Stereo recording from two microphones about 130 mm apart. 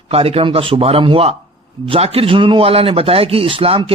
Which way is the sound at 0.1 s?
50° right (ahead or behind).